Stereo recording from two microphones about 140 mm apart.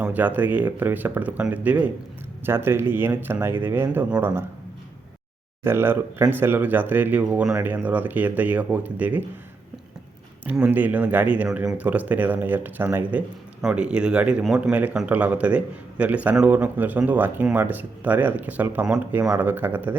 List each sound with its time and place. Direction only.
0.0 s speech: 10° right (ahead or behind)
5.6 s speech: 15° right (ahead or behind)
10.4 s speech: 10° right (ahead or behind)